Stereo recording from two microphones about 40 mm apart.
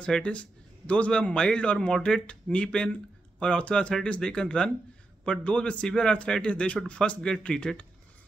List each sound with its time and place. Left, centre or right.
0.2 s a man's voice: left